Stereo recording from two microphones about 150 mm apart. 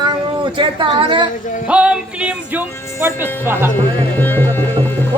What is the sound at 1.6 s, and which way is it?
Speech, 10° right (ahead or behind).